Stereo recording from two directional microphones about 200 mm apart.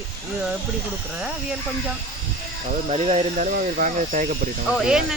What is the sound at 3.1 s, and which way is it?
Speech, 40° right (ahead or behind).